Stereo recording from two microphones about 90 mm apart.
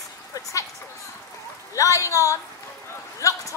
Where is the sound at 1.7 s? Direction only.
35° left (ahead or behind).